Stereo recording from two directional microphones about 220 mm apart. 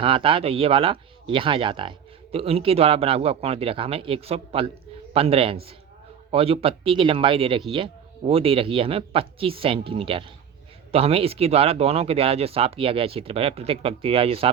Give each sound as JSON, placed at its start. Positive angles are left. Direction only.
{"t": 0.0, "sound": "speech", "side_deg": -25}